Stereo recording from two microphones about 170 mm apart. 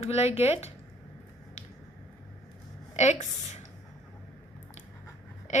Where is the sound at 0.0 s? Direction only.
40° left (ahead or behind).